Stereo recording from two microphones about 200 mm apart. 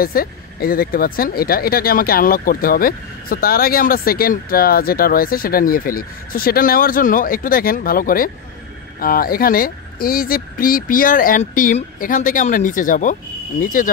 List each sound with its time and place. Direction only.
0.0 s speech: 45° left (ahead or behind)